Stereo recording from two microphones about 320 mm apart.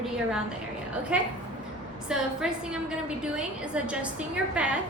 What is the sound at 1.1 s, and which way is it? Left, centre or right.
A woman's voice, centre.